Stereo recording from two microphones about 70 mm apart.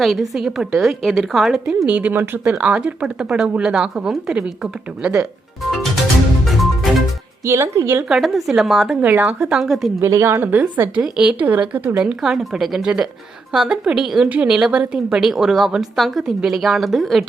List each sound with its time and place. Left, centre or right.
0.0 s a woman's voice: centre
1.9 s speech: centre
6.4 s music: centre
7.4 s speech: right
8.2 s a woman's voice: centre
10.0 s speech: right
10.5 s speech: right
11.0 s speech: centre
11.3 s speech: right
12.0 s a woman's voice: centre